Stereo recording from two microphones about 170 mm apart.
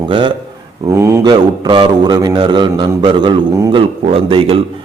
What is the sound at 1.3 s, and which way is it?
A man's voice, 30° right (ahead or behind).